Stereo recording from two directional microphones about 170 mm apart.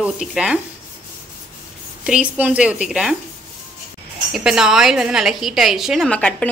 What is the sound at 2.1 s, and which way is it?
A woman's voice, 10° right (ahead or behind).